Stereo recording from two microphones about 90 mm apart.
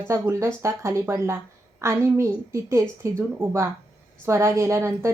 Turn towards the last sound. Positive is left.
turn(degrees=-30)  # may be behind; listen again after turning